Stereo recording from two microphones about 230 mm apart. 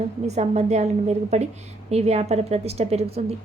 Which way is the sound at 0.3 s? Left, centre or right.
Right.